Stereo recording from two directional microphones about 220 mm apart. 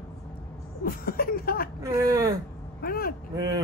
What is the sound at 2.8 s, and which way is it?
Speech, 45° left (ahead or behind).